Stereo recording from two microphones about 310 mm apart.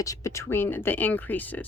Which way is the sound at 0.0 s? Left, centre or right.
Centre.